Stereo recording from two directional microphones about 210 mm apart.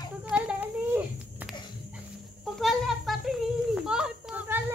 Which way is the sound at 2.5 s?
Centre (ahead or behind).